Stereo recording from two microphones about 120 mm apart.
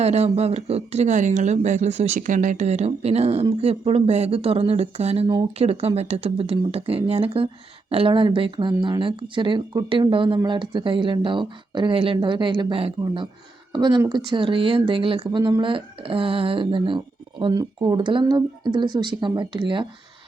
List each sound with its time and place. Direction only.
0.0 s speech: 60° right (ahead or behind); by 17.0 s 45° right (ahead or behind)
17.5 s speech: 35° right (ahead or behind)